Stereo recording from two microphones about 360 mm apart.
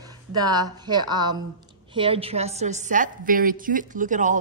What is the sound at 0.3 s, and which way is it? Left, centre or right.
A woman's voice, centre.